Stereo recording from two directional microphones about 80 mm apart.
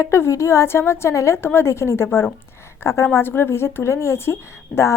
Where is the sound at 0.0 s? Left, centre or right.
Left.